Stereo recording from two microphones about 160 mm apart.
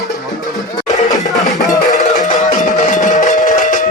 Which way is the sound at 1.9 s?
50° left (ahead or behind).